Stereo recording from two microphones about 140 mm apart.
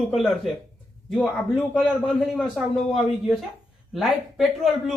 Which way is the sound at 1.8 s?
5° left (ahead or behind).